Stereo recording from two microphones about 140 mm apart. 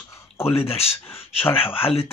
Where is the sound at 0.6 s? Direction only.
45° left (ahead or behind).